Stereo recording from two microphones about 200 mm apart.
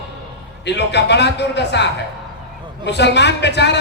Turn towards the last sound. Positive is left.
turn(degrees=60)  # may be behind; listen again after turning